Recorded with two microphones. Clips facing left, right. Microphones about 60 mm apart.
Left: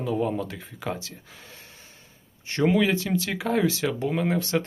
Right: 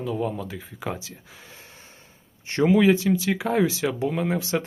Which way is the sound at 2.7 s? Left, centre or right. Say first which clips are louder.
Right 4 dB; centre.